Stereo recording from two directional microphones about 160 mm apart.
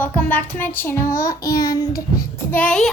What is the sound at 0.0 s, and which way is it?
Child singing, 10° left (ahead or behind).